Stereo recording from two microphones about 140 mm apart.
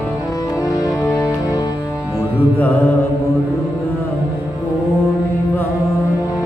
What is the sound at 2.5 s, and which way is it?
Mantra, 10° left (ahead or behind).